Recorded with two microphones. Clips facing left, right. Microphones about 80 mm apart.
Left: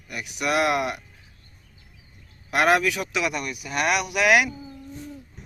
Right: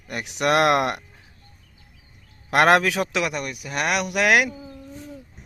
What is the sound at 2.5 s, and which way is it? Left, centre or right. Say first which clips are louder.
Speech: right 3 dB; right.